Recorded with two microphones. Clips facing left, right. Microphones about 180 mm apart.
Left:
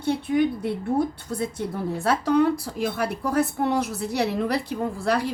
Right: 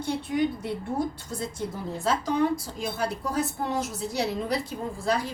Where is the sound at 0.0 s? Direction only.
60° left (ahead or behind).